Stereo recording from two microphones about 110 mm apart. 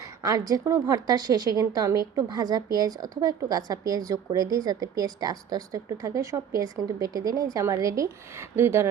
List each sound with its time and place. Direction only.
0.0 s a woman's voice: 35° right (ahead or behind)